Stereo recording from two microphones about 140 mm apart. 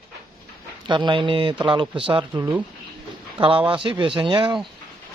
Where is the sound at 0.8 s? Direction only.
35° right (ahead or behind).